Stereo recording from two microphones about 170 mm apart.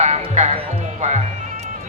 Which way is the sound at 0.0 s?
40° right (ahead or behind).